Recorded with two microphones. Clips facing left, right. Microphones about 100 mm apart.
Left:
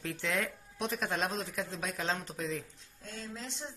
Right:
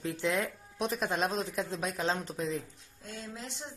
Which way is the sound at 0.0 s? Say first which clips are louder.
Right 3 dB; 15° right (ahead or behind).